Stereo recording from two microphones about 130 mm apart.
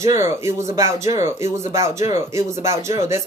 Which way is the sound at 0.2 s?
20° right (ahead or behind).